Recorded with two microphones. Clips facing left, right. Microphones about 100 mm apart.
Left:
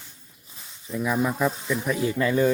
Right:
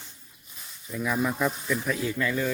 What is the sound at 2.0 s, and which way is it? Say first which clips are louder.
Speech: left 6 dB; 25° left (ahead or behind).